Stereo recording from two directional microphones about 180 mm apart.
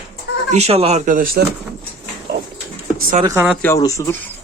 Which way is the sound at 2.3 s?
60° right (ahead or behind).